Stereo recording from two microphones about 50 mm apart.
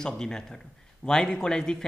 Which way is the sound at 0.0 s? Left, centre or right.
Centre.